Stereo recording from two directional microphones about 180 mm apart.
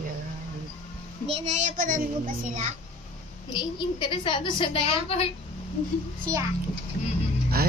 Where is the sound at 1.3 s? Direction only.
40° right (ahead or behind).